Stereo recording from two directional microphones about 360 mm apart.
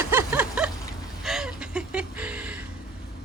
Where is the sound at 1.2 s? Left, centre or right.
Centre.